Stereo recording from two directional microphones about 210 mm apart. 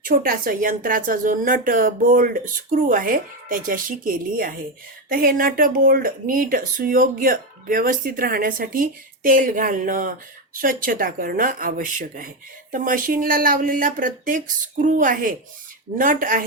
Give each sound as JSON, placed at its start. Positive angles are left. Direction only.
{"t": 0.0, "sound": "speech", "side_deg": -40}